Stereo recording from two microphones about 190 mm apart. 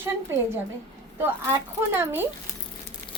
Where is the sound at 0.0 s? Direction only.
10° right (ahead or behind).